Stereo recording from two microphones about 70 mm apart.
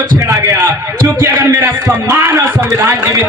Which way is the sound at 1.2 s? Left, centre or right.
Right.